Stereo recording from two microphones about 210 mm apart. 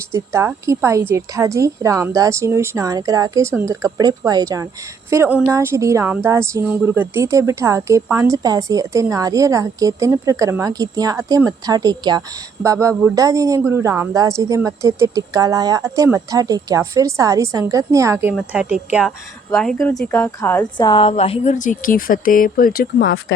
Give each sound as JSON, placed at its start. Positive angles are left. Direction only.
{"t": 0.1, "sound": "a woman's voice", "side_deg": -10}
{"t": 20.7, "sound": "speech", "side_deg": 20}
{"t": 23.0, "sound": "speech", "side_deg": 60}